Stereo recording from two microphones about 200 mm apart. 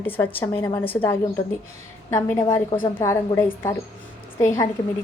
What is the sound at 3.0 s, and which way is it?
Speech, 15° left (ahead or behind).